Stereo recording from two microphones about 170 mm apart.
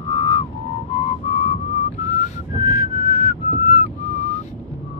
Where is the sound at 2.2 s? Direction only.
45° left (ahead or behind).